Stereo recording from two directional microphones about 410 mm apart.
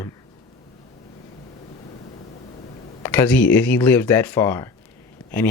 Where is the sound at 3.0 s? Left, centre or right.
Centre.